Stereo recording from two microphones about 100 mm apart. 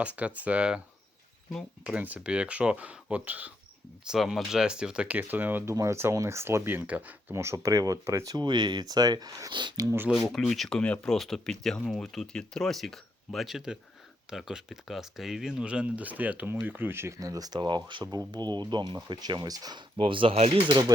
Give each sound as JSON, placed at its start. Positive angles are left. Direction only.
{"t": 0.0, "sound": "speech", "side_deg": -15}
{"t": 1.8, "sound": "speech", "side_deg": -15}
{"t": 4.1, "sound": "speech", "side_deg": 0}
{"t": 5.7, "sound": "speech", "side_deg": -30}
{"t": 7.3, "sound": "speech", "side_deg": -30}
{"t": 8.4, "sound": "speech", "side_deg": -45}
{"t": 10.1, "sound": "speech", "side_deg": 0}
{"t": 17.2, "sound": "speech", "side_deg": -35}
{"t": 20.0, "sound": "speech", "side_deg": -60}